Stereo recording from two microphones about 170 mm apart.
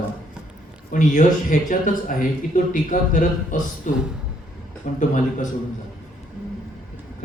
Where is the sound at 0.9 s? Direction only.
50° left (ahead or behind).